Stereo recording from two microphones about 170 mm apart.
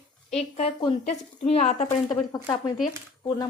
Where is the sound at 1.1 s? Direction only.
40° left (ahead or behind).